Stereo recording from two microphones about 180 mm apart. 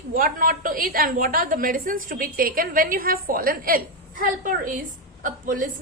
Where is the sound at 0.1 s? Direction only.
50° right (ahead or behind).